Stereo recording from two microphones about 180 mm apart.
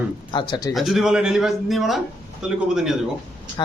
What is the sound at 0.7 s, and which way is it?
A man's voice, centre (ahead or behind).